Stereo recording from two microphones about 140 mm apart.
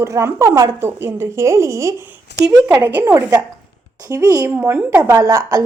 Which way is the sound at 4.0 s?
20° right (ahead or behind).